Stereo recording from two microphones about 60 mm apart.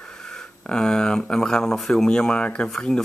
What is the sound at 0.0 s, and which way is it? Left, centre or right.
Speech, centre.